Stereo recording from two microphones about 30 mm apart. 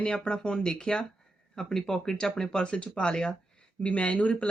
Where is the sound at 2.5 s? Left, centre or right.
Left.